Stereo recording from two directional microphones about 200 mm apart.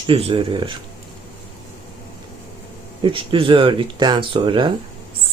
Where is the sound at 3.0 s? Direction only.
25° right (ahead or behind).